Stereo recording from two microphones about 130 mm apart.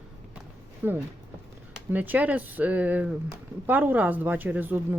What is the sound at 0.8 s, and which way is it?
A woman's voice, 15° right (ahead or behind).